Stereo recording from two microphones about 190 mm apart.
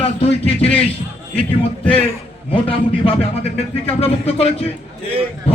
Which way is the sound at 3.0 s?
35° left (ahead or behind).